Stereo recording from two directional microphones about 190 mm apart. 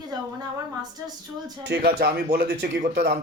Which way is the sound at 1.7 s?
55° right (ahead or behind).